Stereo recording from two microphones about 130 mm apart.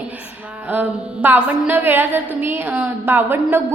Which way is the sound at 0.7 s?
15° right (ahead or behind).